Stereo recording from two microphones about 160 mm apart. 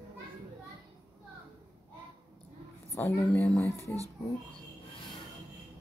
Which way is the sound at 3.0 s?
15° left (ahead or behind).